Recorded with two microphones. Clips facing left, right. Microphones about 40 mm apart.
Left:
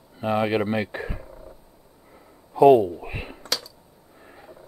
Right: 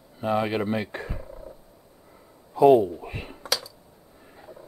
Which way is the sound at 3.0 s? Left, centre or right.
Centre.